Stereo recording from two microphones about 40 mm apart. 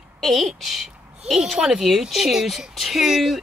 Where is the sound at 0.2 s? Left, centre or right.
Centre.